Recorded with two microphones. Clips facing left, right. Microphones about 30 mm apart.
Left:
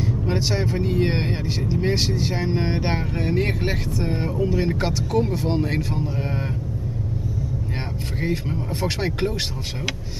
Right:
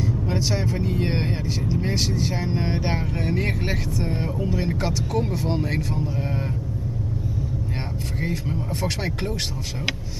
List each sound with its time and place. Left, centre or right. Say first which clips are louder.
0.0 s speech: left 1 dB; centre
8.2 s speech: left 3 dB; centre